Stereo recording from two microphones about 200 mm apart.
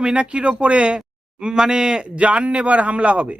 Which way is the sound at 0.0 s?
5° right (ahead or behind).